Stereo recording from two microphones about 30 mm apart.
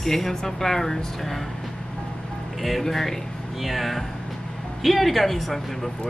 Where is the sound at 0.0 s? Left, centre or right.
Centre.